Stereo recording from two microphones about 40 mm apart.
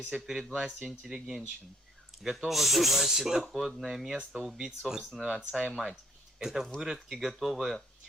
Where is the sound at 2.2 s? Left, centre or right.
Centre.